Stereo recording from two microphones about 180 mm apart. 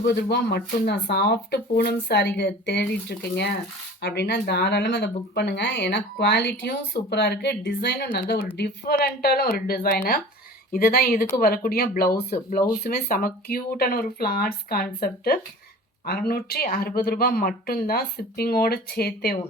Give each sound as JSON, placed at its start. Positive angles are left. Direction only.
{"t": 0.0, "sound": "speech", "side_deg": 70}
{"t": 12.5, "sound": "speech", "side_deg": 45}